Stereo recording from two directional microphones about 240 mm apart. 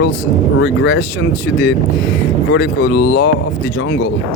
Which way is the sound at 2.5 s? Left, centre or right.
Left.